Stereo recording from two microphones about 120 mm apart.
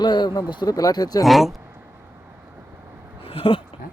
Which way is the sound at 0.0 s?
40° left (ahead or behind).